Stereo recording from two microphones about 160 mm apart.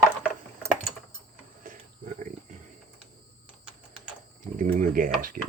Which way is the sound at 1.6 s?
55° right (ahead or behind).